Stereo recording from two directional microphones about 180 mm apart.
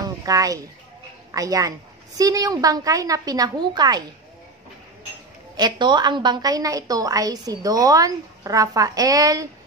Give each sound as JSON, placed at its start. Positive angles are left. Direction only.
{"t": 0.0, "sound": "a sound", "side_deg": -20}
{"t": 1.3, "sound": "a woman's voice", "side_deg": -20}
{"t": 5.6, "sound": "a woman's voice", "side_deg": -25}